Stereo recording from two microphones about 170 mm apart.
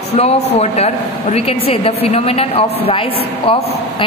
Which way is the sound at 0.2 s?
40° left (ahead or behind).